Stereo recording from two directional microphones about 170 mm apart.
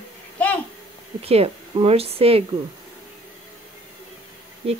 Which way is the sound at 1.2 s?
35° right (ahead or behind).